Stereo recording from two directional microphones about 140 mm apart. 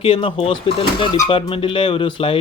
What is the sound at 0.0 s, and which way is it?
Speech, 40° left (ahead or behind).